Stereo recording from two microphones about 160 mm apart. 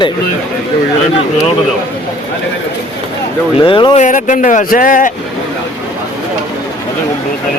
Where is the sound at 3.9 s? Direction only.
50° left (ahead or behind).